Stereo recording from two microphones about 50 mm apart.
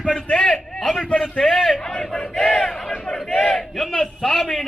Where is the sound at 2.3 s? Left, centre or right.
Centre.